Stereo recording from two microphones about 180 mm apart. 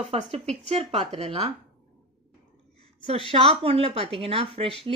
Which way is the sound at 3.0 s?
30° right (ahead or behind).